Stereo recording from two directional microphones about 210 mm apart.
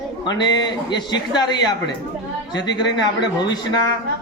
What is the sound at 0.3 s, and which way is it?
A man's voice, 20° left (ahead or behind).